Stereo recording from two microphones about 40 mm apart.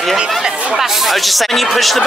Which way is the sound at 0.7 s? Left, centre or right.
Centre.